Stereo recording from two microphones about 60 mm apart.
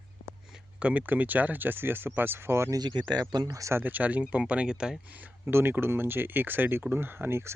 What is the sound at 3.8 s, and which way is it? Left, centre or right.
Speech, right.